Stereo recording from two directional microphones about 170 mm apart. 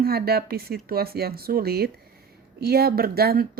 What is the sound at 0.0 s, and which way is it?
Speech, 65° right (ahead or behind).